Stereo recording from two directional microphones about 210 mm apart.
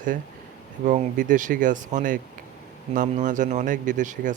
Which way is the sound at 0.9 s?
35° right (ahead or behind).